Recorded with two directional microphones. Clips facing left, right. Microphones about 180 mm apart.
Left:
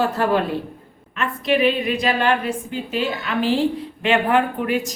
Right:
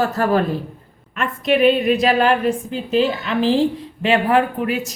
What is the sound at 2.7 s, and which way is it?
A woman's voice, 30° right (ahead or behind).